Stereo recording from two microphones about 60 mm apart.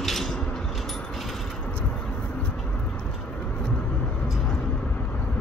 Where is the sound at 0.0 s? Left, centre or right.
Centre.